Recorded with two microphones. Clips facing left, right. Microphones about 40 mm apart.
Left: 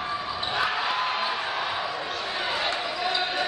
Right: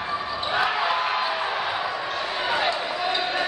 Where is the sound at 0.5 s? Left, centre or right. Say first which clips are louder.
Right 3 dB; centre.